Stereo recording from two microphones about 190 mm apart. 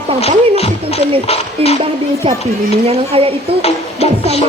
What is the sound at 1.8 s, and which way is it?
Speech, 30° right (ahead or behind).